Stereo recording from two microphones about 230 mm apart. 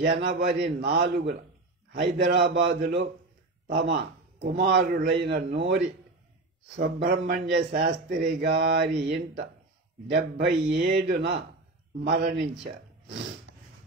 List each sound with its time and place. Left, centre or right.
0.0 s a man's voice: right